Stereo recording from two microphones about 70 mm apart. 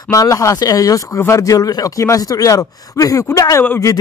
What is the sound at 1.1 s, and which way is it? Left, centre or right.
Speech, left.